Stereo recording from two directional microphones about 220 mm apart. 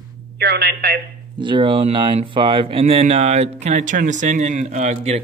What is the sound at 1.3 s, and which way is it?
Speech, 20° right (ahead or behind).